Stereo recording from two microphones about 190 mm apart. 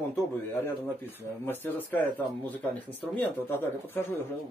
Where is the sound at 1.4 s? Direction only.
10° left (ahead or behind).